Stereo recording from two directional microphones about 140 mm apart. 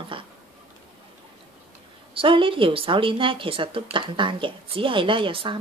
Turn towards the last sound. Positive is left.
turn(degrees=-35)  # may be behind; listen again after turning